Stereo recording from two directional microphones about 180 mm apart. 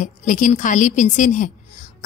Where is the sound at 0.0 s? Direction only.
45° left (ahead or behind).